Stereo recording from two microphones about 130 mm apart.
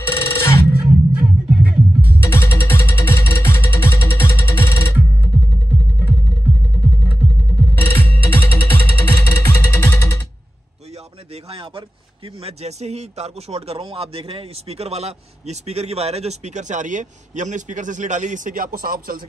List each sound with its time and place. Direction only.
0.0 s music: 20° left (ahead or behind)
0.8 s music: 5° right (ahead or behind)
2.0 s music: 20° left (ahead or behind)
7.7 s music: 15° left (ahead or behind)
12.4 s speech: 55° right (ahead or behind); by 19.1 s 90° right